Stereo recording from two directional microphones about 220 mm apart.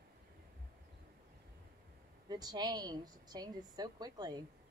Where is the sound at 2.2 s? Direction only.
20° right (ahead or behind).